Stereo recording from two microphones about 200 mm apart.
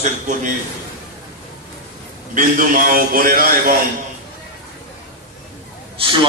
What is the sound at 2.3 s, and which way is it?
A man's voice, 45° right (ahead or behind).